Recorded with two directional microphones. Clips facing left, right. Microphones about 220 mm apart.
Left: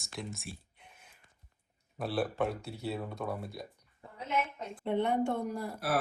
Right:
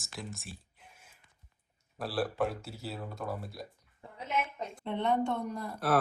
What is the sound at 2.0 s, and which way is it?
A woman's voice, centre (ahead or behind).